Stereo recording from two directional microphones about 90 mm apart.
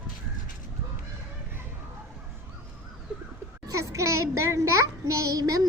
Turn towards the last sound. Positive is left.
turn(degrees=-40)  # may be behind; listen again after turning